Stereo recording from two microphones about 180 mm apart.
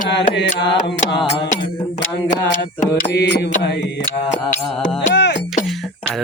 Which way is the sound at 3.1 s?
70° left (ahead or behind).